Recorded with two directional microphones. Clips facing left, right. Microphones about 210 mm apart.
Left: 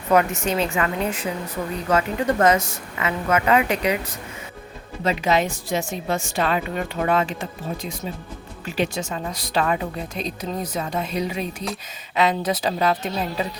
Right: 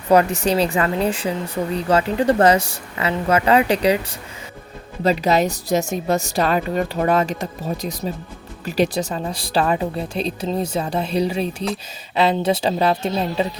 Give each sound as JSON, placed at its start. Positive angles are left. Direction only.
{"t": 0.1, "sound": "a woman's voice", "side_deg": -35}
{"t": 5.0, "sound": "a woman's voice", "side_deg": -35}